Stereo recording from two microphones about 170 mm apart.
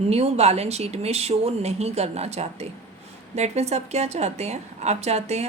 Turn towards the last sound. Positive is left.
turn(degrees=-40)  # may be behind; listen again after turning